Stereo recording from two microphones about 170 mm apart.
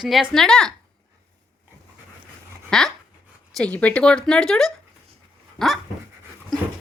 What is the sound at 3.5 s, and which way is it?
A woman's voice, 5° left (ahead or behind).